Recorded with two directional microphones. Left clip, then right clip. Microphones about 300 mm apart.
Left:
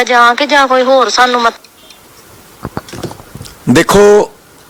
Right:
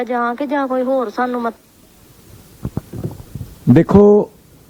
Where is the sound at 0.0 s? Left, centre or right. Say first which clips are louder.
Left 12 dB; centre.